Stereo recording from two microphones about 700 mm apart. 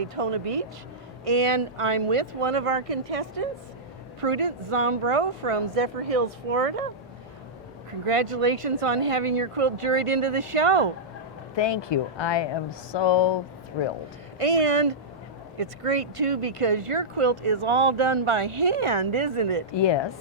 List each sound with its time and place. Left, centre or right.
0.0 s speech: right
8.0 s speech: right
11.5 s speech: left
14.3 s speech: right
19.7 s speech: left